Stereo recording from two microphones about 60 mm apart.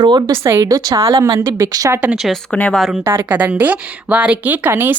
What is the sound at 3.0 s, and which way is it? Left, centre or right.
Speech, right.